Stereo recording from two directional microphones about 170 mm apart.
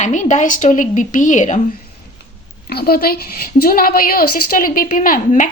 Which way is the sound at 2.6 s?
65° left (ahead or behind).